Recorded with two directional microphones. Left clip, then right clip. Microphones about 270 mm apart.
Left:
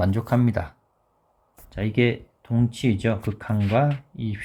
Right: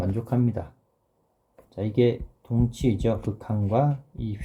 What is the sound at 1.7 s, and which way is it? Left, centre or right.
Speech, centre.